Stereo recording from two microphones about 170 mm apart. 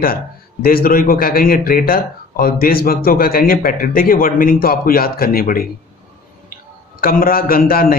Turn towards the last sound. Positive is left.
turn(degrees=60)  # may be behind; listen again after turning